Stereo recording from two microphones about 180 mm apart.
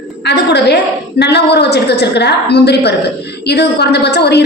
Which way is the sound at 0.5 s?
70° left (ahead or behind).